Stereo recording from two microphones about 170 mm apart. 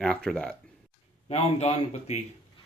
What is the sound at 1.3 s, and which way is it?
Speech, 35° left (ahead or behind).